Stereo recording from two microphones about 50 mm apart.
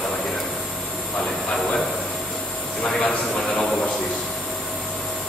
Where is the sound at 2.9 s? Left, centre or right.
Centre.